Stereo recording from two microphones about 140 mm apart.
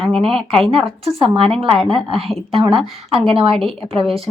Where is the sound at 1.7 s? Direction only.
Centre (ahead or behind).